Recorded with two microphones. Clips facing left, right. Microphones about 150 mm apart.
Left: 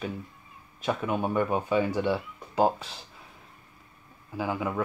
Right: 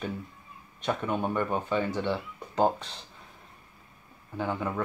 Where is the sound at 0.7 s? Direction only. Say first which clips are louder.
Left 1 dB; 5° left (ahead or behind).